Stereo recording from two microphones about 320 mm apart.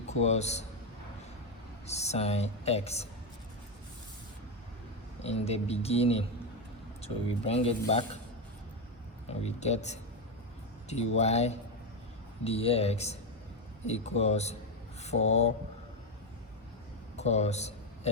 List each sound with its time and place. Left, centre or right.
0.1 s speech: left
1.9 s speech: centre
5.2 s speech: centre
9.4 s speech: centre
11.2 s speech: centre
17.2 s a sound: left